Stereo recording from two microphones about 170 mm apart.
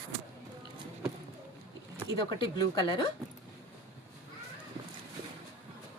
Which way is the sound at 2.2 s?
25° left (ahead or behind).